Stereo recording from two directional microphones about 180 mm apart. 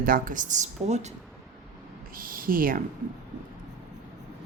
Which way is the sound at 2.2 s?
50° right (ahead or behind).